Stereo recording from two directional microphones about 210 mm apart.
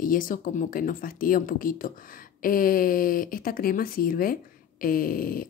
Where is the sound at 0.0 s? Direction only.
40° left (ahead or behind).